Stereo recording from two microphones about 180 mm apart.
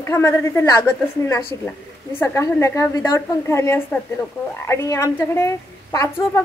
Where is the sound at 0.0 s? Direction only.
15° left (ahead or behind).